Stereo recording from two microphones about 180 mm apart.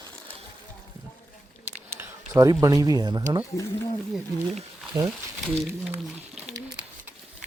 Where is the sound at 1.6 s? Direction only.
15° right (ahead or behind).